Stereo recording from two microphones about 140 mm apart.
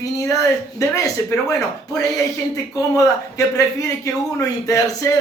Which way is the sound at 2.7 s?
25° left (ahead or behind).